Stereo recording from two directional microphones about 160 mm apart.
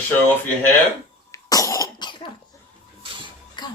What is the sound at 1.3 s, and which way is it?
Cough, 20° left (ahead or behind).